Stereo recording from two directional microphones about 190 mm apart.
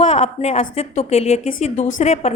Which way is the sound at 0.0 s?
35° left (ahead or behind).